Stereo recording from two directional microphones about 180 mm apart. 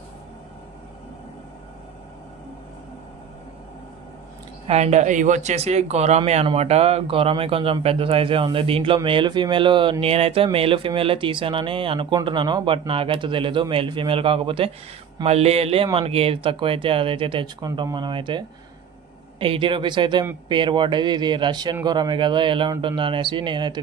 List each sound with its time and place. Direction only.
4.6 s speech: 40° right (ahead or behind)
19.4 s speech: 30° right (ahead or behind)